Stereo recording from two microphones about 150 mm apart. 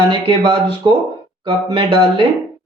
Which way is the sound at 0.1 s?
30° right (ahead or behind).